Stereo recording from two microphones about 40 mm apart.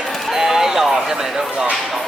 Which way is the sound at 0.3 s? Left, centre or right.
Centre.